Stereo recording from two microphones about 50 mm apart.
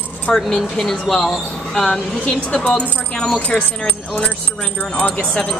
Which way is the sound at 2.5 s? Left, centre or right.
Centre.